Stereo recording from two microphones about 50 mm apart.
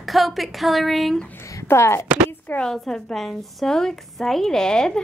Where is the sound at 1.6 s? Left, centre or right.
Left.